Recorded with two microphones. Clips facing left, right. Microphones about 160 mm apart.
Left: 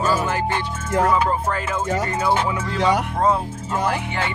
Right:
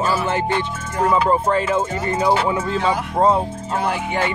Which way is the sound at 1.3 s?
25° right (ahead or behind).